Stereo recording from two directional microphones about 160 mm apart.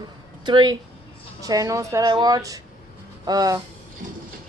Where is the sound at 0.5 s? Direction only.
30° right (ahead or behind).